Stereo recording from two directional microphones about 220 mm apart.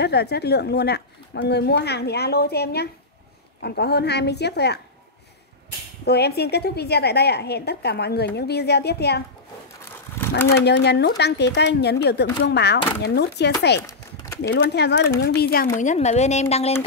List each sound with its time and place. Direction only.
0.0 s speech: 50° left (ahead or behind)
6.0 s speech: 45° left (ahead or behind)
10.5 s speech: 50° left (ahead or behind)
13.7 s a sound: 15° left (ahead or behind)
14.4 s speech: 50° left (ahead or behind); by 16.7 s 30° left (ahead or behind)